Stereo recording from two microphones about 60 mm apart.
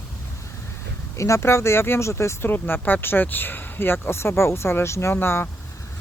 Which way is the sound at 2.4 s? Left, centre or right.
Left.